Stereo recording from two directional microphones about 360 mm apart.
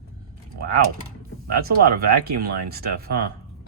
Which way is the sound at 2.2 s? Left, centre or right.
Right.